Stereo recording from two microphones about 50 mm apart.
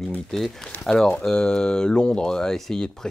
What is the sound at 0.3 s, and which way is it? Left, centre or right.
Speech, centre.